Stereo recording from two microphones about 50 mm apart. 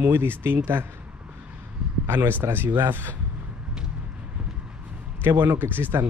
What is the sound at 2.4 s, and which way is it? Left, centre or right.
Speech, right.